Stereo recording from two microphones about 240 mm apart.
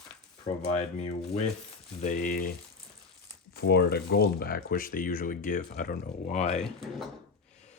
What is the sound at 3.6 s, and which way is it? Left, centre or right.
Speech, left.